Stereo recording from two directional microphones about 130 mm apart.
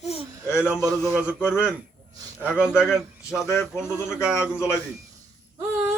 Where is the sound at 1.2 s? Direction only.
5° right (ahead or behind).